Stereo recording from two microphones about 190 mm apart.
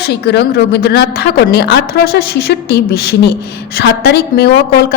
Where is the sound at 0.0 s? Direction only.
60° left (ahead or behind).